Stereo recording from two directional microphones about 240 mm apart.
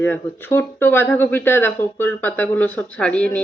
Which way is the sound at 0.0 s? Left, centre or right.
Centre.